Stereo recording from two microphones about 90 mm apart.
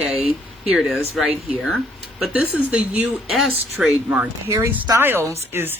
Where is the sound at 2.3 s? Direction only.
15° right (ahead or behind).